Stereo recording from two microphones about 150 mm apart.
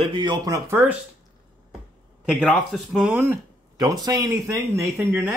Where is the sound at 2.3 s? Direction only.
5° right (ahead or behind).